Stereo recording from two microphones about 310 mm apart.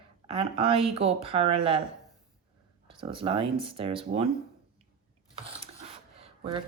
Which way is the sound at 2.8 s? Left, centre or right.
Centre.